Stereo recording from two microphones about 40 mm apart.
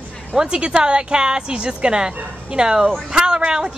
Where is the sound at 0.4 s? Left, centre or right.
Right.